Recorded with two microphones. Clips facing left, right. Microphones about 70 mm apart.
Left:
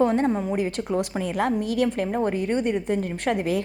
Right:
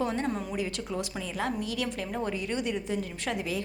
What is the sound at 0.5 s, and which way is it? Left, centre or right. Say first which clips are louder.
A woman's voice: left 8 dB; left.